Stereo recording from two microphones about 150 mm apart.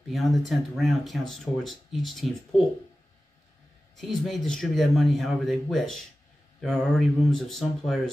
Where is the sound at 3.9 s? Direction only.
Centre (ahead or behind).